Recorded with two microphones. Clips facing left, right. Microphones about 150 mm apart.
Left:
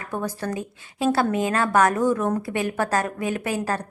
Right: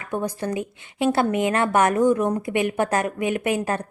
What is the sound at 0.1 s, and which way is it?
A woman's voice, 20° right (ahead or behind).